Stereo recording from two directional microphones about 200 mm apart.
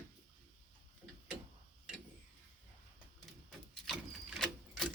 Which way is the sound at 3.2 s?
Centre (ahead or behind).